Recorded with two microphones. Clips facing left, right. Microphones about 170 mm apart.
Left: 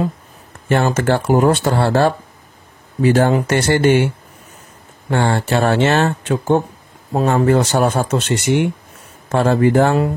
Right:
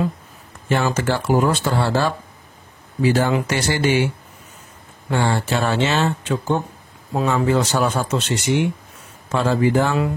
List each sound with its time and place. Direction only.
0.7 s a man's voice: 55° left (ahead or behind)
5.1 s a man's voice: 60° left (ahead or behind)